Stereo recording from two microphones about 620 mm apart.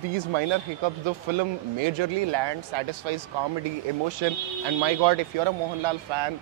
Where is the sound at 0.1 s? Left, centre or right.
Right.